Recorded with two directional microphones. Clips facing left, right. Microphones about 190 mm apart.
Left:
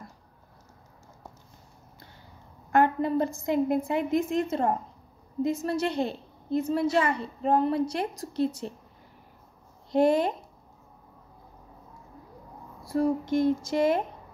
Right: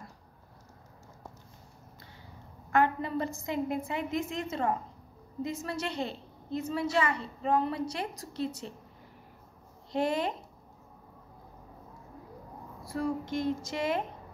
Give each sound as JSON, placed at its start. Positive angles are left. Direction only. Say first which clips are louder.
{"t": 2.7, "sound": "a sound", "louder": "left 4 dB", "side_deg": 50}
{"t": 3.4, "sound": "a woman's voice", "louder": "left 7 dB", "side_deg": 50}
{"t": 9.9, "sound": "a woman's voice", "louder": "left 7 dB", "side_deg": 50}
{"t": 12.9, "sound": "a woman's voice", "louder": "left 7 dB", "side_deg": 50}